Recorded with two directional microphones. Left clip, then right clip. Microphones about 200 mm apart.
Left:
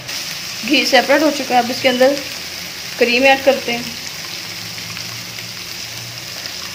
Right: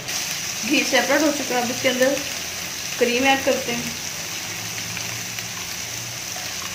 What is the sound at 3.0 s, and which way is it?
Speech, 50° left (ahead or behind).